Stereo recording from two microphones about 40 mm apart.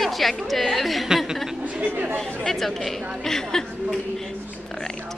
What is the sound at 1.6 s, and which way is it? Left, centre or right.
Speech, right.